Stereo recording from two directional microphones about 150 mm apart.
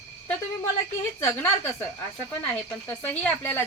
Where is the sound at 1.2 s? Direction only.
15° left (ahead or behind).